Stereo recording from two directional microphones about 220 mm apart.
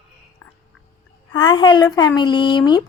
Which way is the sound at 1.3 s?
20° left (ahead or behind).